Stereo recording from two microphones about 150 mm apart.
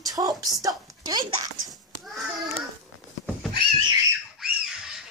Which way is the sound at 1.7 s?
Centre (ahead or behind).